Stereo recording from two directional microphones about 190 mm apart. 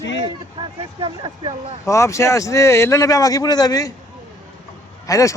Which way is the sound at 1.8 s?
15° left (ahead or behind).